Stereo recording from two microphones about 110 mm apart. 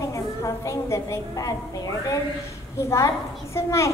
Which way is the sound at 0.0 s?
30° left (ahead or behind).